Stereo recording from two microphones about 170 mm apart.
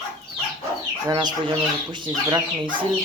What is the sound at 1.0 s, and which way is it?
Speech, 25° right (ahead or behind).